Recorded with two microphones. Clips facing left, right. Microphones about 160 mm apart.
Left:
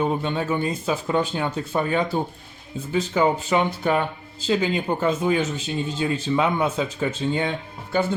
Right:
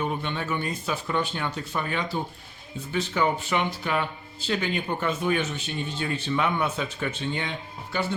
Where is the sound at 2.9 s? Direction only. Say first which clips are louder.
Left 5 dB; 35° left (ahead or behind).